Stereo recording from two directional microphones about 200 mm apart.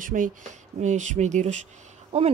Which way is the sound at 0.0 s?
40° right (ahead or behind).